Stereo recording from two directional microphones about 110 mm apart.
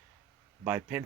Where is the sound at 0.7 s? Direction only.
10° right (ahead or behind).